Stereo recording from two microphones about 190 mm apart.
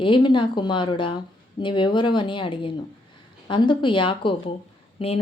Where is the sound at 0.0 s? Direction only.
25° left (ahead or behind).